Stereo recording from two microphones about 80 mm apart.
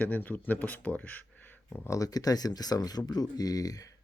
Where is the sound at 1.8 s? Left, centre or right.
Left.